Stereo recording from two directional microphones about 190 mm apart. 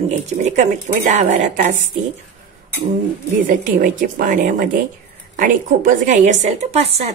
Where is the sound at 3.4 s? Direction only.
45° right (ahead or behind).